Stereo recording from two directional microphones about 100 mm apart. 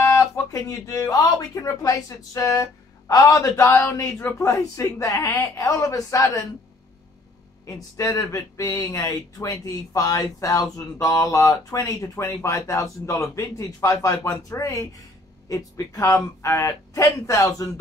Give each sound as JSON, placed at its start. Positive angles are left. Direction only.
{"t": 0.0, "sound": "speech", "side_deg": 30}
{"t": 7.6, "sound": "speech", "side_deg": 35}